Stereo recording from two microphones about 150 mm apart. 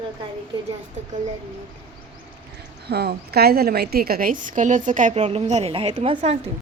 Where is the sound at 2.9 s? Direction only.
90° right; by 6.4 s 40° right (ahead or behind).